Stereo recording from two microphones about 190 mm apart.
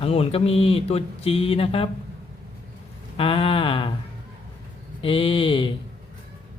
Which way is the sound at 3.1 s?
30° left (ahead or behind).